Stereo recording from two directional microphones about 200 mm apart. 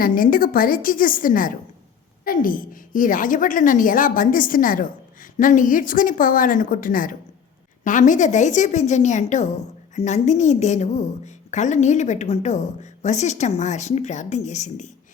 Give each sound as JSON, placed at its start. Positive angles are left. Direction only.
{"t": 0.0, "sound": "a woman's voice", "side_deg": 45}